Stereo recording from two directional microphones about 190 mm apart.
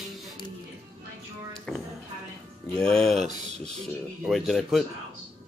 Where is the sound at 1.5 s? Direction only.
5° left (ahead or behind).